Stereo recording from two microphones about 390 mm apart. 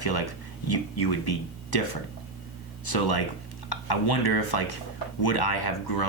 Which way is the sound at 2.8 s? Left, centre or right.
Left.